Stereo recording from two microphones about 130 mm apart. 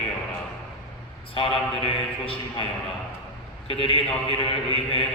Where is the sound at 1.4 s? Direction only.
45° left (ahead or behind).